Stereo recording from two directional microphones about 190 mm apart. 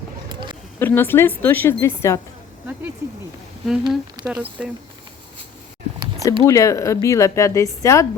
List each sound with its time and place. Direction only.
0.3 s a sound: 25° right (ahead or behind)
0.8 s speech: 10° left (ahead or behind)
3.7 s speech: centre (ahead or behind)
6.4 s speech: 15° left (ahead or behind)